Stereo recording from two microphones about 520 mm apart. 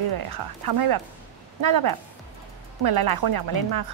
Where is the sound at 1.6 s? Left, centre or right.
Right.